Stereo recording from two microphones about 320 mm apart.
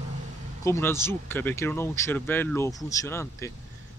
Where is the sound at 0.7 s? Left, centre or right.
Centre.